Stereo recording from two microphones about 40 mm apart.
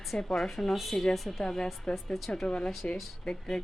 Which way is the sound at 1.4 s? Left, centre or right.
Left.